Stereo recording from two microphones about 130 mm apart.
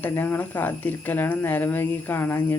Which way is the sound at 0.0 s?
15° left (ahead or behind).